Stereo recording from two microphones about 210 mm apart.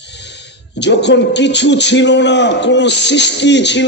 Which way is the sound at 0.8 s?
55° left (ahead or behind).